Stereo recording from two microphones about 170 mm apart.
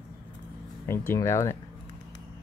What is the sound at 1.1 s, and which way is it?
Speech, 15° left (ahead or behind).